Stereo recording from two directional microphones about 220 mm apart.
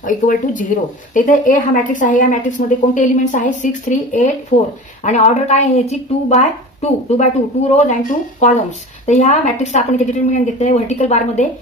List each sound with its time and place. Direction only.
0.0 s speech: 35° left (ahead or behind)